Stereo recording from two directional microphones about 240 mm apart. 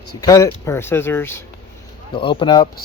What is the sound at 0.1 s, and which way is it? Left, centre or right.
Speech, centre.